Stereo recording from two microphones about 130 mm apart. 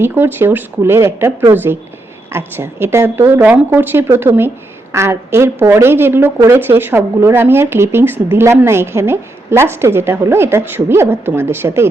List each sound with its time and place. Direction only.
0.0 s a woman's voice: 15° right (ahead or behind)